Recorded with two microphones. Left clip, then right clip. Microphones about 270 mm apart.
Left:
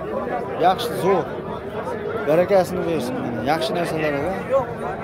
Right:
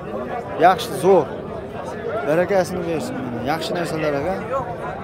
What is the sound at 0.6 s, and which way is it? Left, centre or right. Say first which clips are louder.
Speech: right 4 dB; centre.